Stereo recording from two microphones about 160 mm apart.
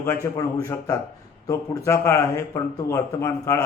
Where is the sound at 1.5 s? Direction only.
20° left (ahead or behind).